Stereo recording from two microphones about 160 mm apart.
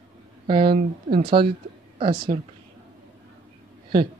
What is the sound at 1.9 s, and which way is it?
Speech, 30° right (ahead or behind).